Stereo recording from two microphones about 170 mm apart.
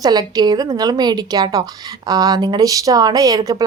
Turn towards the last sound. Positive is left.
turn(degrees=-20)  # may be behind; listen again after turning